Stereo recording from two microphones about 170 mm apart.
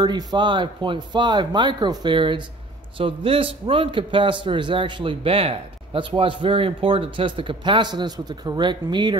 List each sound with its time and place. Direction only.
0.0 s a man's voice: 25° right (ahead or behind)